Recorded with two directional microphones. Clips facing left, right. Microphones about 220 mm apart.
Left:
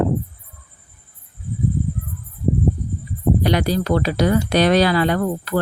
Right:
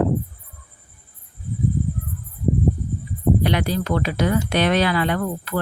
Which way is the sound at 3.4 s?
40° left (ahead or behind).